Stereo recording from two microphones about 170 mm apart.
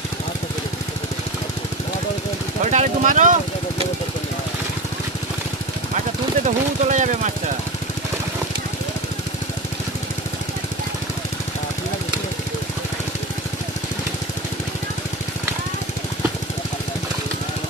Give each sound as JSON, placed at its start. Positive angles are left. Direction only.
{"t": 2.6, "sound": "speech", "side_deg": -45}
{"t": 6.4, "sound": "speech", "side_deg": -45}